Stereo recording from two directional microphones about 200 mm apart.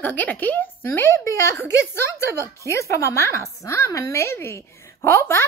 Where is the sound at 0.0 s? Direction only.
10° left (ahead or behind).